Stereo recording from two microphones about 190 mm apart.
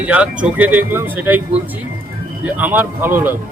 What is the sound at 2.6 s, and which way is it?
Speech, 10° right (ahead or behind).